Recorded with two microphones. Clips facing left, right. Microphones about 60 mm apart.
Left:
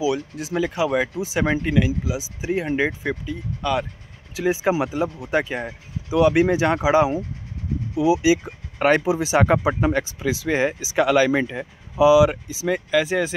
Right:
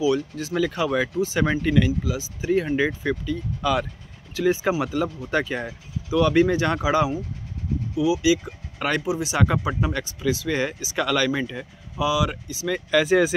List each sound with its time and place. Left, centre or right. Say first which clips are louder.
0.0 s speech: right 1 dB; centre
3.6 s speech: even; centre
4.4 s speech: left 1 dB; centre
12.9 s speech: right 4 dB; centre